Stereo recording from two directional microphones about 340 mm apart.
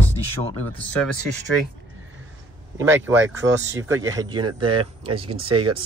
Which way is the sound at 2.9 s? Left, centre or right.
Centre.